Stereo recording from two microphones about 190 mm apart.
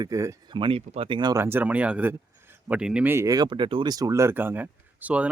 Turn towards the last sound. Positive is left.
turn(degrees=-10)  # may be behind; listen again after turning